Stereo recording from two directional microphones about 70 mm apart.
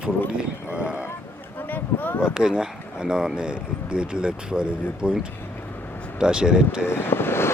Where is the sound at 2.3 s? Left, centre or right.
Centre.